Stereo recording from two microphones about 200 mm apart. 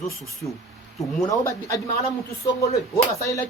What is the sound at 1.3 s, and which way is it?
Speech, 15° left (ahead or behind).